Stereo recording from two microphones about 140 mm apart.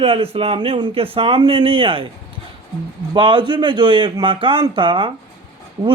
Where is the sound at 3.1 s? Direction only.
35° right (ahead or behind).